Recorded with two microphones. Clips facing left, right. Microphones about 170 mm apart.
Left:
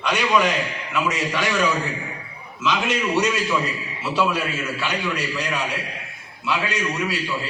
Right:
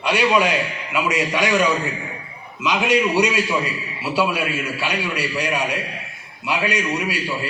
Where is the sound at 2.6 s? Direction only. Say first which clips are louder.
Right 4 dB; 15° right (ahead or behind).